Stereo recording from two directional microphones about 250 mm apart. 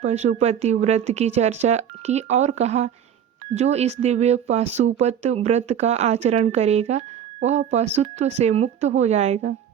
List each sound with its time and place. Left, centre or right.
0.0 s speech: right